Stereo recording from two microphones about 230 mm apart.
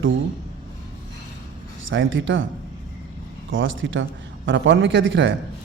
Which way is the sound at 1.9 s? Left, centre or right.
Right.